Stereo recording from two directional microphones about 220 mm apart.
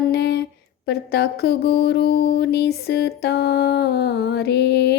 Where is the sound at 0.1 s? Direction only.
50° left (ahead or behind).